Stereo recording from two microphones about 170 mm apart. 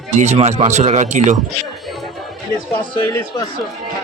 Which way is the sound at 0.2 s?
40° right (ahead or behind).